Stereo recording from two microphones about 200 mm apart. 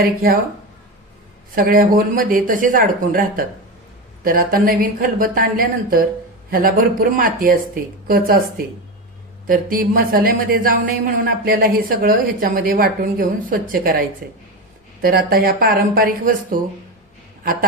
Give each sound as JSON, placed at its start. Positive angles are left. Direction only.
{"t": 0.0, "sound": "a woman's voice", "side_deg": -50}
{"t": 1.5, "sound": "a woman's voice", "side_deg": -45}